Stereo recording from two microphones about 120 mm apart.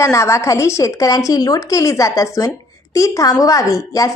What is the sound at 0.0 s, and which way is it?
A woman's voice, 25° left (ahead or behind).